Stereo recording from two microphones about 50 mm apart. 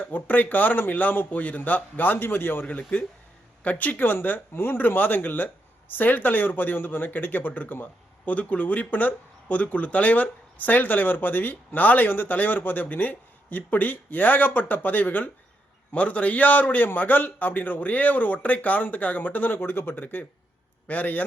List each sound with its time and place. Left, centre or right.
0.0 s speech: left
3.6 s speech: left
15.9 s speech: left
20.8 s a man's voice: left